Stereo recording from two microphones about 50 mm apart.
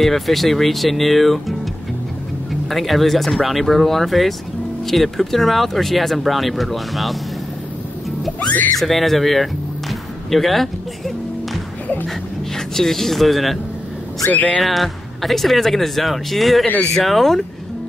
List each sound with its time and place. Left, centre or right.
0.0 s speech: centre
2.7 s speech: centre
8.4 s speech: left
8.7 s music: centre
12.5 s speech: centre
14.3 s speech: left
14.6 s speech: centre